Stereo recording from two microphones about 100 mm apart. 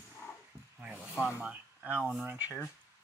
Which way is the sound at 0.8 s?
15° right (ahead or behind).